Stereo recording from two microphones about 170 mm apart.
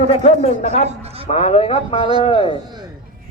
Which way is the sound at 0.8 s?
35° right (ahead or behind).